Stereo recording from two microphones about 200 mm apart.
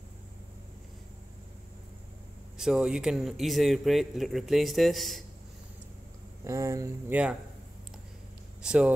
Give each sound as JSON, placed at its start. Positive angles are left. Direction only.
{"t": 2.5, "sound": "speech", "side_deg": -5}
{"t": 6.4, "sound": "speech", "side_deg": -15}
{"t": 8.6, "sound": "speech", "side_deg": -5}